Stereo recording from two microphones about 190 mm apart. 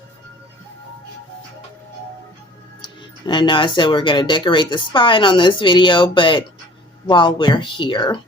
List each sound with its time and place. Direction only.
2.8 s speech: 25° left (ahead or behind)